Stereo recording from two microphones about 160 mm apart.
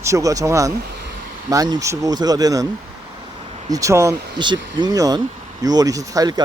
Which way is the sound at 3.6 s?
20° right (ahead or behind).